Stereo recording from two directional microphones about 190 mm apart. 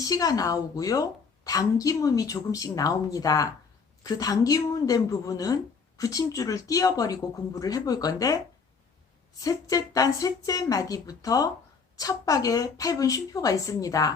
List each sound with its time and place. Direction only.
0.0 s a woman's voice: 20° left (ahead or behind)
9.4 s a woman's voice: 20° left (ahead or behind)